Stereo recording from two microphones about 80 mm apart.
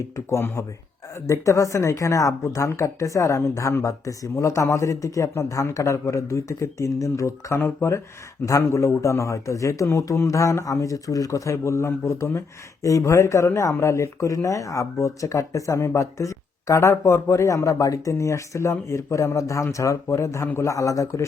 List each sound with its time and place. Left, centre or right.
0.3 s a man's voice: left